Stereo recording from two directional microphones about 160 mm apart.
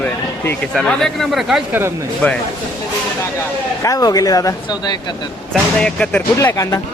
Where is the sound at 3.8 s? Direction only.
25° left (ahead or behind).